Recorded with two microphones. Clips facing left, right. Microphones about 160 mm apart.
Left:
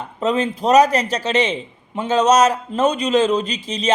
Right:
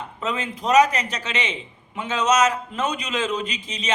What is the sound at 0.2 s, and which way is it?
A man's voice, 35° left (ahead or behind).